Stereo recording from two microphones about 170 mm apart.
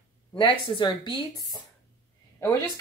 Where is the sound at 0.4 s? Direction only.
30° left (ahead or behind).